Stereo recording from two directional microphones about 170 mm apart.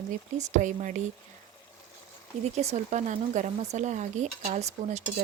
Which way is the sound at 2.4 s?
40° right (ahead or behind).